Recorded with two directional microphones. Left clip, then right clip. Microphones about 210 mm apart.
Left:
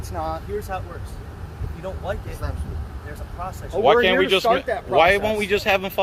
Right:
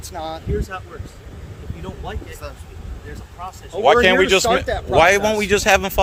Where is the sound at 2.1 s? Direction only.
Centre (ahead or behind).